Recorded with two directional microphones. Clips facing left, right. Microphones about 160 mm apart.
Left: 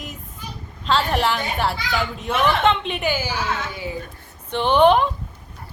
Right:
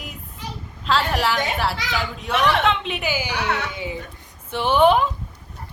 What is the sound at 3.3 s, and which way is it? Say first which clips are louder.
Speech: right 1 dB; 70° right (ahead or behind).